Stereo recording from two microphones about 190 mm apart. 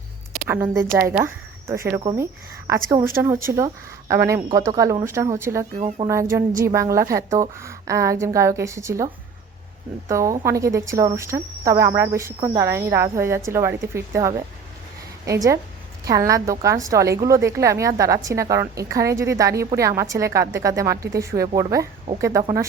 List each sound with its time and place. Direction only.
0.4 s a woman's voice: 10° right (ahead or behind)
6.7 s a woman's voice: 15° right (ahead or behind)
10.1 s a woman's voice: 15° right (ahead or behind)